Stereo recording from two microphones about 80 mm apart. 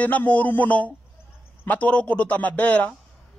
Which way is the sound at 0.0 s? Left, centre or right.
Centre.